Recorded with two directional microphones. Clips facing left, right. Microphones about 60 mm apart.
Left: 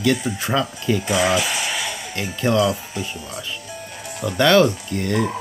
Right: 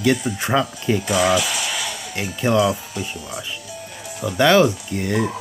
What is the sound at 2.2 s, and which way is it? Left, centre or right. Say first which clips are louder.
Speech: right 1 dB; centre.